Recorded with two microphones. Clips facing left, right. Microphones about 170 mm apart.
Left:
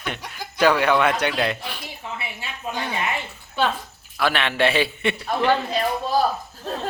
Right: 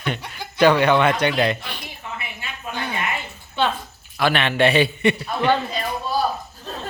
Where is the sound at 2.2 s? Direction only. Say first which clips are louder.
Left 1 dB; 30° left (ahead or behind).